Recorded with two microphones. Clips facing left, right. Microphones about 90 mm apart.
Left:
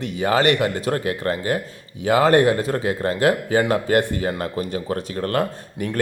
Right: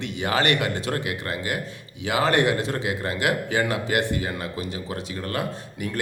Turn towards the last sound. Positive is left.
turn(degrees=45)  # may be behind; listen again after turning